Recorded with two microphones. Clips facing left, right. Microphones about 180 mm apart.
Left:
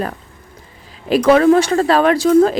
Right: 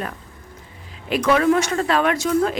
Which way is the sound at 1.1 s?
35° left (ahead or behind).